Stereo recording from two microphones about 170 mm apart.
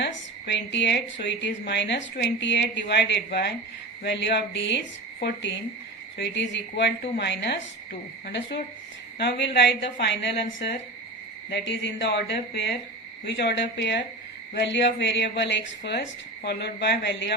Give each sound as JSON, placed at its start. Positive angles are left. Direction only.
{"t": 0.0, "sound": "a woman's voice", "side_deg": 90}
{"t": 4.0, "sound": "a woman's voice", "side_deg": 90}
{"t": 9.1, "sound": "a woman's voice", "side_deg": 90}